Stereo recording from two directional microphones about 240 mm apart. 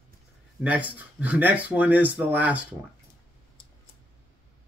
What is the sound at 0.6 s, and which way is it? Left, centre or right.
Speech, centre.